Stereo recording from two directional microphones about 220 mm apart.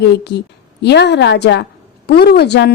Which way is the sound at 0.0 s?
50° left (ahead or behind).